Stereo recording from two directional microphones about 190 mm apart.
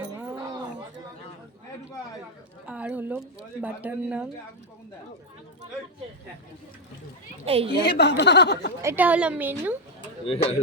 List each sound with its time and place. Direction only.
2.6 s speech: 5° right (ahead or behind)
7.4 s a woman's voice: 30° right (ahead or behind)
7.9 s speech: 60° left (ahead or behind)
8.8 s a woman's voice: 10° right (ahead or behind)
10.2 s speech: 30° left (ahead or behind)